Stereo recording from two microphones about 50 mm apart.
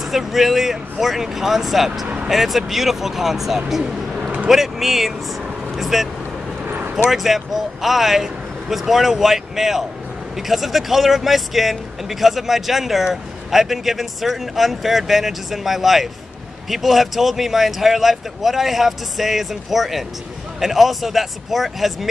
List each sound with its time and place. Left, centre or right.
0.0 s speech: centre
6.6 s a sound: right
7.1 s speech: centre